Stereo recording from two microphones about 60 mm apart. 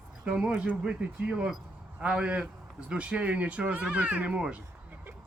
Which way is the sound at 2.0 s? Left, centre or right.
Centre.